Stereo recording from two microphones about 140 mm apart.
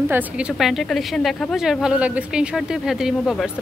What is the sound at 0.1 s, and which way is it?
A woman's voice, 5° right (ahead or behind).